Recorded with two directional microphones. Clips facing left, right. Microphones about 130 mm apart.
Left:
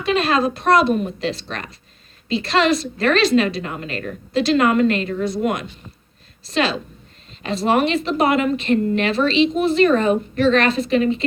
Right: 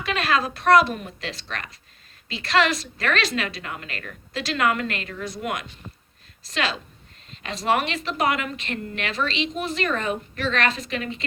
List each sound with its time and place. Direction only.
0.0 s speech: 25° left (ahead or behind)